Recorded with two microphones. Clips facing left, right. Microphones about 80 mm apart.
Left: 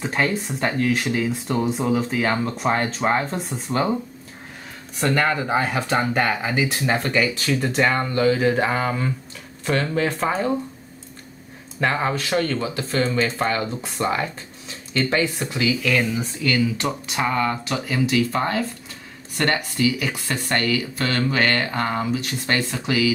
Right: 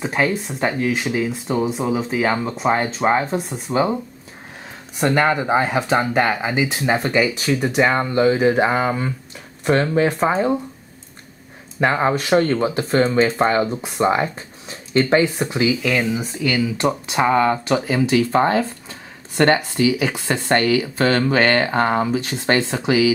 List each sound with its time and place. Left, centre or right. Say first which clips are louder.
0.0 s speech: right 2 dB; centre
5.0 s speech: right 3 dB; centre
9.9 s speech: right 5 dB; centre
11.8 s speech: right 4 dB; right
13.7 s speech: right 5 dB; centre
15.8 s speech: right 2 dB; centre